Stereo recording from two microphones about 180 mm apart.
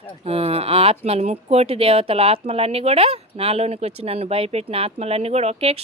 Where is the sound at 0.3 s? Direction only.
30° right (ahead or behind).